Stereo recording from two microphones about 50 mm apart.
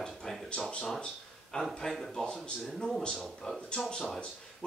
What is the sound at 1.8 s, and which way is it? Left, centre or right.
A man's voice, centre.